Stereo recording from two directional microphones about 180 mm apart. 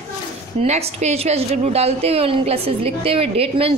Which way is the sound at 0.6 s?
35° right (ahead or behind).